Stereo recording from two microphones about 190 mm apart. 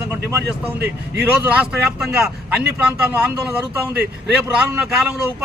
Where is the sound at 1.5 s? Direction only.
5° right (ahead or behind).